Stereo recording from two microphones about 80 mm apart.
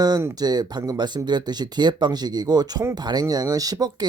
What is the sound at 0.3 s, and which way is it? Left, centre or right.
Speech, right.